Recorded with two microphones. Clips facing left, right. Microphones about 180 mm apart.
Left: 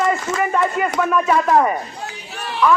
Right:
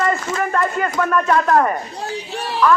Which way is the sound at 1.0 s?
5° left (ahead or behind).